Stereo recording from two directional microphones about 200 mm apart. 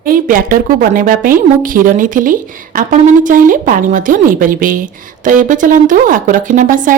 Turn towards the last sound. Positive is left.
turn(degrees=-40)  # may be behind; listen again after turning